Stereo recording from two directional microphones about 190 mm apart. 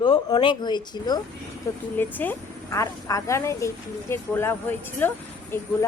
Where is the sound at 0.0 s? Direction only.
25° left (ahead or behind).